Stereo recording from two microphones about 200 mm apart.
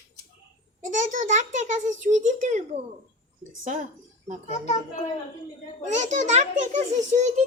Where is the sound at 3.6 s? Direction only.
40° right (ahead or behind).